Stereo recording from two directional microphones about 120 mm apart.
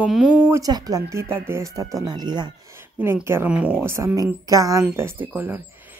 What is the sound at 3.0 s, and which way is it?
Speech, 20° right (ahead or behind).